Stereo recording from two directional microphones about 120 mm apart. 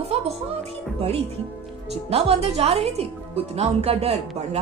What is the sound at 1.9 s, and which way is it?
A woman's voice, 55° right (ahead or behind).